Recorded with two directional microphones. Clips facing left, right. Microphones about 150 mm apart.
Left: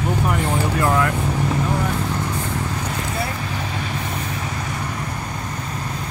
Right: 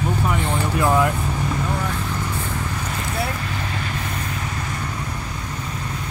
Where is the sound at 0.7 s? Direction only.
10° right (ahead or behind).